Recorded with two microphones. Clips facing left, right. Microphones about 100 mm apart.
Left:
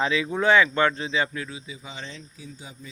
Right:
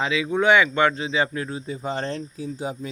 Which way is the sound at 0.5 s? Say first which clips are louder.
Even; 15° right (ahead or behind).